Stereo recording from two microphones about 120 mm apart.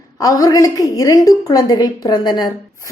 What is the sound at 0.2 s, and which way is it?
A woman's voice, 30° left (ahead or behind).